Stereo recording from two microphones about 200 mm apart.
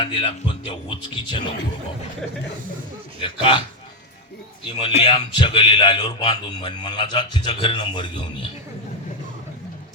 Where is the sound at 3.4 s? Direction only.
25° left (ahead or behind).